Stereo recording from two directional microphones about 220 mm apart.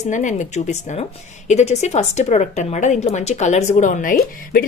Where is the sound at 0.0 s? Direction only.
35° left (ahead or behind).